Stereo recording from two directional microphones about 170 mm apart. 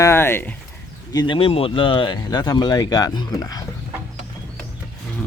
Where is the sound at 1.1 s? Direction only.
25° left (ahead or behind).